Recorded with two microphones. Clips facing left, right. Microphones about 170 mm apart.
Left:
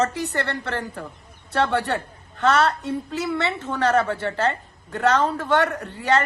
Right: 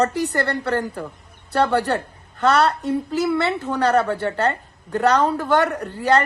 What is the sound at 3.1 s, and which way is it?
A woman's voice, 35° right (ahead or behind).